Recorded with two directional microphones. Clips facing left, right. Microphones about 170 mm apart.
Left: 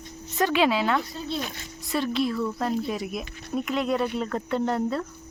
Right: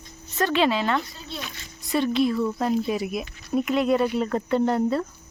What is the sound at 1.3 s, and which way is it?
Speech, 45° left (ahead or behind).